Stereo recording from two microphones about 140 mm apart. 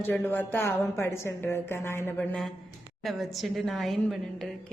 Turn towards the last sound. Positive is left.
turn(degrees=0)  # may be behind; listen again after turning